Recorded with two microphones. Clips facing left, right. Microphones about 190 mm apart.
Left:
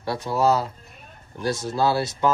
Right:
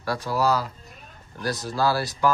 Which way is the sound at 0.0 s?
25° left (ahead or behind).